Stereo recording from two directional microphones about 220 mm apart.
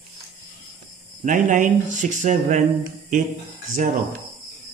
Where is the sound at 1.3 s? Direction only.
35° right (ahead or behind).